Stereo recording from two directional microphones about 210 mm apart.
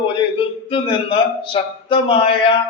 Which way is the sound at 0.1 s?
25° left (ahead or behind).